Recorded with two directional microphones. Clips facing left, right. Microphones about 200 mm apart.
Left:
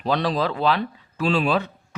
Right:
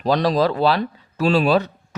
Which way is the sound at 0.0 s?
40° right (ahead or behind).